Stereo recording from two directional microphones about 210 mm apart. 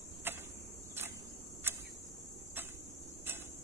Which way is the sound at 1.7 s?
10° right (ahead or behind).